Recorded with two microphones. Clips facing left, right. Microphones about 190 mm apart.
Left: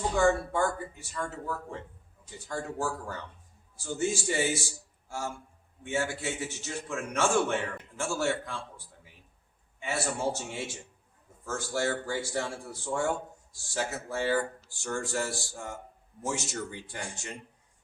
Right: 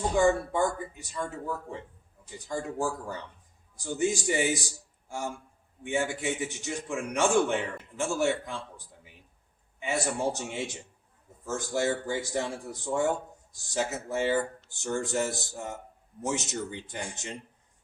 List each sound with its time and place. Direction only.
0.2 s a man's voice: 15° right (ahead or behind)
9.8 s a man's voice: 15° right (ahead or behind)